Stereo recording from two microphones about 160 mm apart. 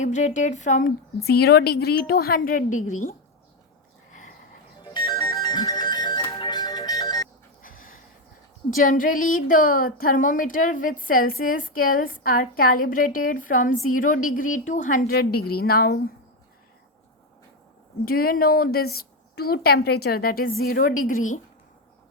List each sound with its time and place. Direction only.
0.0 s a woman's voice: 50° left (ahead or behind)
4.8 s music: 25° left (ahead or behind)
7.6 s a sound: 60° left (ahead or behind)
8.8 s a woman's voice: 60° left (ahead or behind)
18.0 s speech: 65° left (ahead or behind)